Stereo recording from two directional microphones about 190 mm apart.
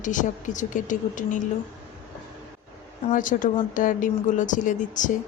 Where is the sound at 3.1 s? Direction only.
45° left (ahead or behind).